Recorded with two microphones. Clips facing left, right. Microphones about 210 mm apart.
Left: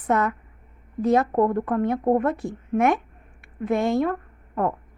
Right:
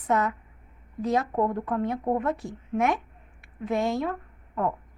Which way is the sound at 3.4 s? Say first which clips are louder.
Left 4 dB; 55° left (ahead or behind).